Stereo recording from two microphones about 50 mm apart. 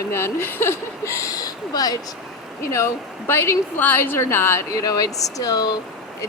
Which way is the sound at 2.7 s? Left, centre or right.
Left.